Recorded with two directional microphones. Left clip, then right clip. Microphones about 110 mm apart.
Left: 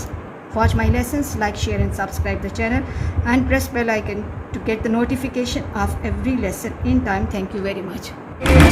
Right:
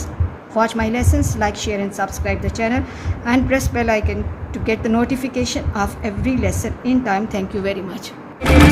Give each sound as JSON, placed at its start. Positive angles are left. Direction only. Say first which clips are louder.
{"t": 0.5, "sound": "a woman's voice", "louder": "right 2 dB", "side_deg": -35}